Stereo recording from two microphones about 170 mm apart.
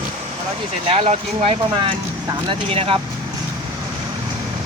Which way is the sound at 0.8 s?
35° right (ahead or behind).